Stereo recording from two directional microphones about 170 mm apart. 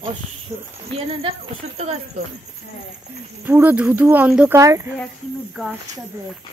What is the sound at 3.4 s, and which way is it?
Speech, 10° right (ahead or behind).